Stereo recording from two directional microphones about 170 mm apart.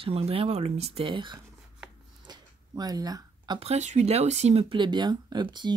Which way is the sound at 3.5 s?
40° right (ahead or behind).